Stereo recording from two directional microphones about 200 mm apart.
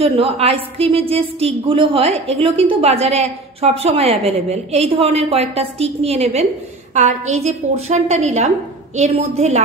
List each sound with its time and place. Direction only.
0.0 s a woman's voice: 30° right (ahead or behind)